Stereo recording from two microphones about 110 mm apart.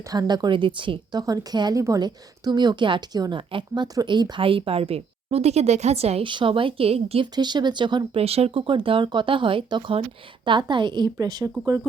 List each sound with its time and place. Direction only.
0.1 s a woman's voice: 40° right (ahead or behind)
1.2 s a woman's voice: 35° right (ahead or behind); by 6.2 s 70° right (ahead or behind)
6.2 s speech: 50° right (ahead or behind)
7.3 s speech: 40° right (ahead or behind)
8.1 s a woman's voice: 65° right (ahead or behind)
8.6 s speech: 50° right (ahead or behind)